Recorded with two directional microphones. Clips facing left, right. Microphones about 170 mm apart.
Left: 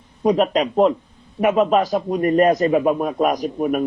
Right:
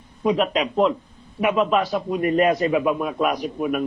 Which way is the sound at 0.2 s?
40° left (ahead or behind).